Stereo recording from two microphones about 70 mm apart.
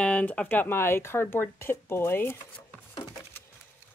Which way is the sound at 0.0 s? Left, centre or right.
Centre.